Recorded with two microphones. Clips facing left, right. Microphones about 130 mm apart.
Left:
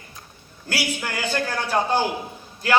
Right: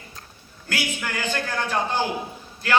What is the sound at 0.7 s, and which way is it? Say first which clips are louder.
A man's voice: left 1 dB; 40° left (ahead or behind).